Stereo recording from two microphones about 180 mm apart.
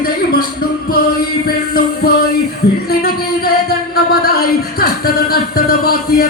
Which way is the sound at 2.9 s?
60° left (ahead or behind).